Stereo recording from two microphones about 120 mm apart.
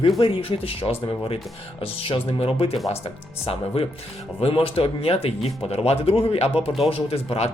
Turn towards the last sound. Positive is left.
turn(degrees=60)  # may be behind; listen again after turning